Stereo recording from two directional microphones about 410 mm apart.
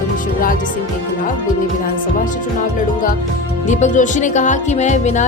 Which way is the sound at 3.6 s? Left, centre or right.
Centre.